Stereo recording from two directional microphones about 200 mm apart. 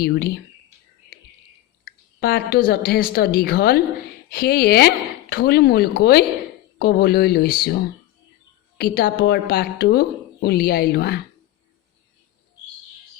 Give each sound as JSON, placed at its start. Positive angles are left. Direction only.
{"t": 0.0, "sound": "a woman's voice", "side_deg": 50}
{"t": 1.8, "sound": "a woman's voice", "side_deg": 50}
{"t": 8.8, "sound": "a woman's voice", "side_deg": 50}